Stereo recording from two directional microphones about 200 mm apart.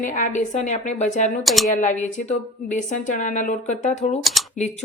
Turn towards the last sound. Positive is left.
turn(degrees=35)  # may be behind; listen again after turning